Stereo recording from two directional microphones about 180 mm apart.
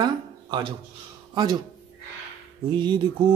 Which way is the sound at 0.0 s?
25° right (ahead or behind).